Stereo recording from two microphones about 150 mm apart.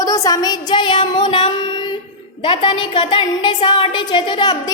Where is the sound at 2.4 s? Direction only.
35° left (ahead or behind).